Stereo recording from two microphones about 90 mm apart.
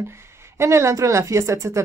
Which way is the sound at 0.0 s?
30° right (ahead or behind).